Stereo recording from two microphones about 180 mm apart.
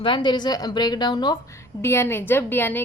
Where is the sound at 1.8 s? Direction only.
15° left (ahead or behind).